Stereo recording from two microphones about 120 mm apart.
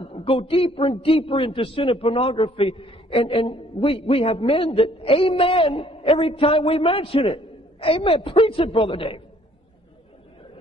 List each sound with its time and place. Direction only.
0.0 s a man's voice: 50° left (ahead or behind)